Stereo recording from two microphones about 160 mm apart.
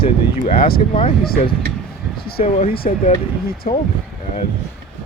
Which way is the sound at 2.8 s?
45° left (ahead or behind).